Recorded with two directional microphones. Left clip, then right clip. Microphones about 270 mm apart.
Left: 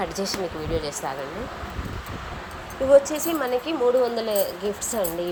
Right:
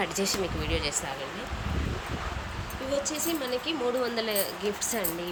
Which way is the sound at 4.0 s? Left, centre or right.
Centre.